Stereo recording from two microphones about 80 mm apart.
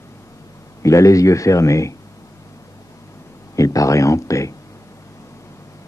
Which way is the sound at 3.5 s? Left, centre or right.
Left.